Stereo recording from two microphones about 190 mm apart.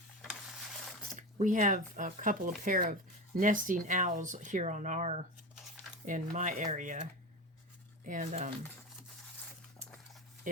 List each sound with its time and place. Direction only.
0.2 s a sound: centre (ahead or behind)
1.4 s speech: 45° right (ahead or behind)
10.5 s speech: 45° right (ahead or behind)